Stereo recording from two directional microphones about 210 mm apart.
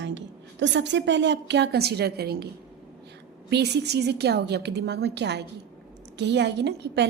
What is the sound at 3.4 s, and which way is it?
A woman's voice, 55° right (ahead or behind).